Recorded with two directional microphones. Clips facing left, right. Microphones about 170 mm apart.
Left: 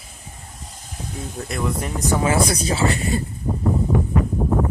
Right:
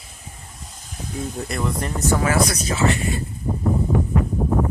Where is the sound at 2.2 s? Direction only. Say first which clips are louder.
Left 1 dB; 25° left (ahead or behind).